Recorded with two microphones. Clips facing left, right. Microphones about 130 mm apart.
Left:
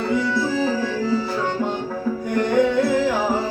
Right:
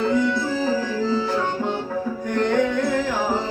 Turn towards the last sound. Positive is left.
turn(degrees=10)  # may be behind; listen again after turning